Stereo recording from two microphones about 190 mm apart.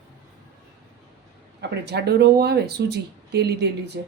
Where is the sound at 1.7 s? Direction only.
60° right (ahead or behind).